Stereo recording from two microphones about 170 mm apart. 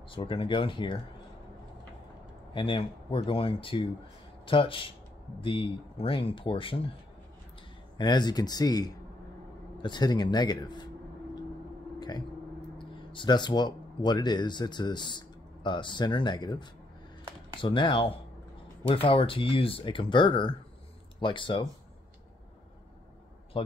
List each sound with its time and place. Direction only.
0.1 s a man's voice: 30° left (ahead or behind)
2.5 s speech: 30° left (ahead or behind)
8.0 s a man's voice: 25° left (ahead or behind)
12.7 s a man's voice: 30° left (ahead or behind)
23.5 s a man's voice: 30° left (ahead or behind)